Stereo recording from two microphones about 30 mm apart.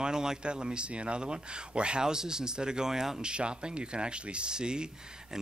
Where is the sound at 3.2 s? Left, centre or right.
Right.